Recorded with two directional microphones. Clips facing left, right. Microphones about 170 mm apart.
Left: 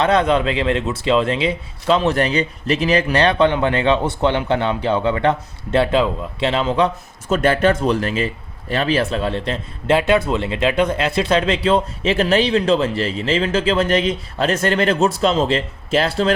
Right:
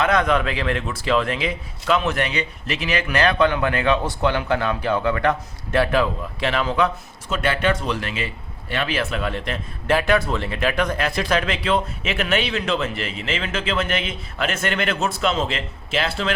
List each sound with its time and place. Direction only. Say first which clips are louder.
0.0 s speech: left 3 dB; 30° left (ahead or behind)
7.3 s speech: left 6 dB; 40° left (ahead or behind)